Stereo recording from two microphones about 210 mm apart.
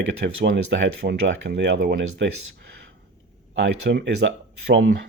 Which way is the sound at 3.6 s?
60° right (ahead or behind).